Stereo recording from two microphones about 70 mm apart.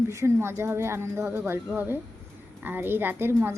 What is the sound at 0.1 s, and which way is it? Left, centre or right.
A woman's voice, right.